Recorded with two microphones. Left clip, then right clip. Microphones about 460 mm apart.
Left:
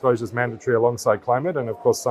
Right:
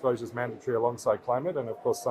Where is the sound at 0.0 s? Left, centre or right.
Left.